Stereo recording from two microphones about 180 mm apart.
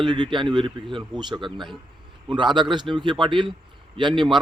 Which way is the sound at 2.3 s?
25° right (ahead or behind).